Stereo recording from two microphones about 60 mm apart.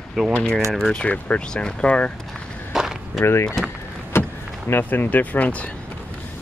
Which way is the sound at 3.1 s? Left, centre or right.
Left.